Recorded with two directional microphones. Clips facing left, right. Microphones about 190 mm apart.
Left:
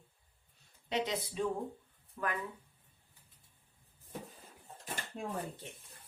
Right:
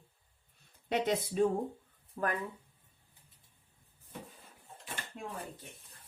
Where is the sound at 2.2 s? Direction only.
40° right (ahead or behind).